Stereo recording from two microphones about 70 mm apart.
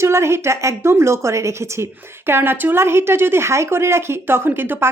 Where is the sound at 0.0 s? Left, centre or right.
Right.